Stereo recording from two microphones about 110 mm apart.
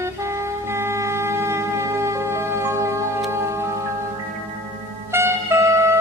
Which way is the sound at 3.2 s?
25° right (ahead or behind).